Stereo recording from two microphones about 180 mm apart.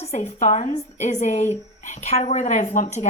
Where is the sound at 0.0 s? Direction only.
35° left (ahead or behind).